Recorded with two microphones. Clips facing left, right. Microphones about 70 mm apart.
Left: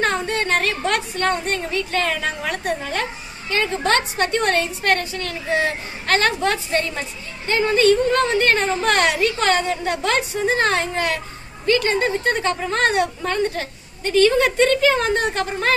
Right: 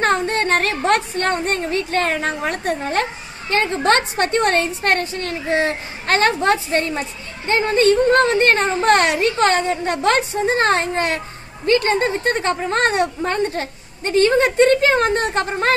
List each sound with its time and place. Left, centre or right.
0.0 s a woman's voice: right